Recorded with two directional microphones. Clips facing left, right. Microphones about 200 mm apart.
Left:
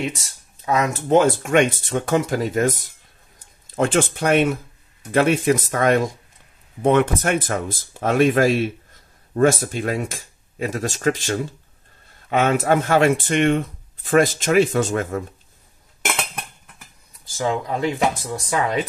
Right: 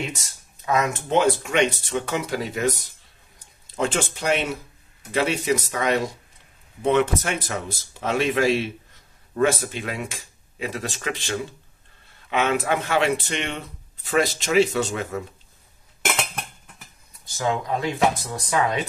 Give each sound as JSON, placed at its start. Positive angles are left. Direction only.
{"t": 0.2, "sound": "speech", "side_deg": 30}
{"t": 1.1, "sound": "speech", "side_deg": 50}
{"t": 17.2, "sound": "speech", "side_deg": 30}